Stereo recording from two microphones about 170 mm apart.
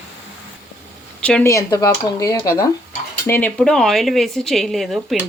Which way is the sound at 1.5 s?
20° left (ahead or behind).